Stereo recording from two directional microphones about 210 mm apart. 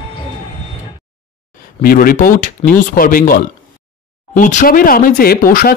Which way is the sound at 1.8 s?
45° left (ahead or behind).